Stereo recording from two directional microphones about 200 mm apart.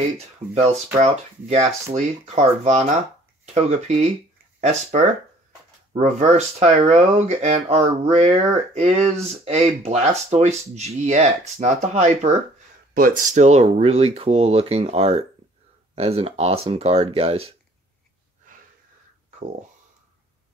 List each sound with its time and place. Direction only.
0.9 s speech: 35° right (ahead or behind)